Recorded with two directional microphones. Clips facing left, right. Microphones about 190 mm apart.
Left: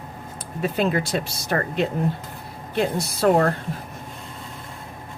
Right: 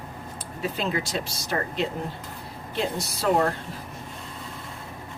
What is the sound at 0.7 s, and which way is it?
Speech, 55° left (ahead or behind).